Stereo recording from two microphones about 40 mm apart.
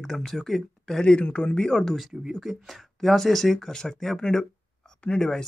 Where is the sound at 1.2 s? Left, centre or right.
Left.